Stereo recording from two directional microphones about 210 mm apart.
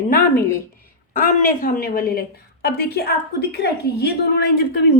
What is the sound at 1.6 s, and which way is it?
A woman's voice, 45° left (ahead or behind).